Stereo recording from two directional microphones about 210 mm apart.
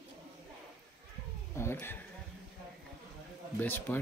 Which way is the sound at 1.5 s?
10° left (ahead or behind).